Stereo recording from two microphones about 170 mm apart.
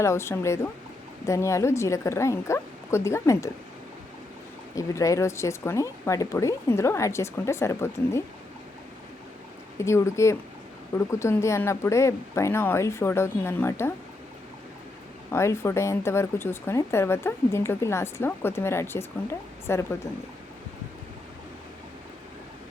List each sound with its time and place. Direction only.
0.0 s speech: 15° left (ahead or behind)
4.7 s speech: 20° left (ahead or behind)
9.7 s speech: 15° left (ahead or behind)
15.3 s speech: 15° left (ahead or behind)